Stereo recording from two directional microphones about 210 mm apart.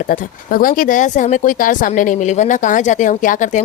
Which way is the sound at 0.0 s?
40° left (ahead or behind).